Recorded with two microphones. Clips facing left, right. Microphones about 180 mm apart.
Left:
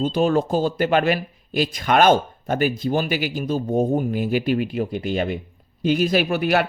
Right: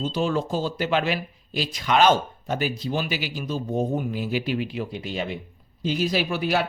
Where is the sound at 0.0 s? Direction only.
55° left (ahead or behind).